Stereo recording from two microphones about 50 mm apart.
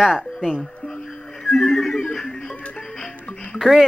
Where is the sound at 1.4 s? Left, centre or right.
Centre.